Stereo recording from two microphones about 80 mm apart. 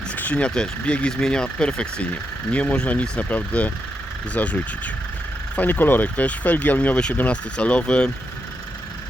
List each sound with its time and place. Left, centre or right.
0.2 s speech: centre